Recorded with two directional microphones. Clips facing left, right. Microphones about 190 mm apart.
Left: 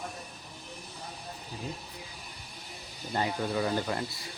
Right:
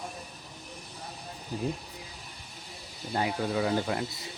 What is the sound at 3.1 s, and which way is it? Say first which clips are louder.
Speech: right 1 dB; 5° right (ahead or behind).